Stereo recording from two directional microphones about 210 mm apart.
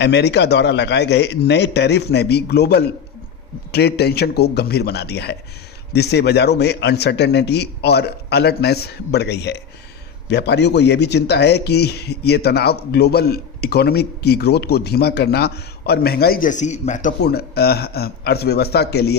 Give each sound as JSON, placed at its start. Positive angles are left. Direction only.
{"t": 0.0, "sound": "a man's voice", "side_deg": 55}
{"t": 17.2, "sound": "a man's voice", "side_deg": 50}